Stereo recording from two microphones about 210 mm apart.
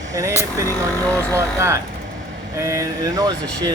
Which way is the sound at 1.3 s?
15° right (ahead or behind).